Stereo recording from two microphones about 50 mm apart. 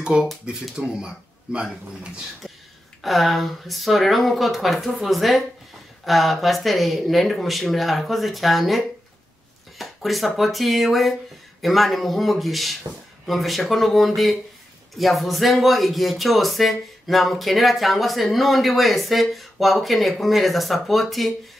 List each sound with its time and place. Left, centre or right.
0.2 s speech: centre
3.0 s speech: centre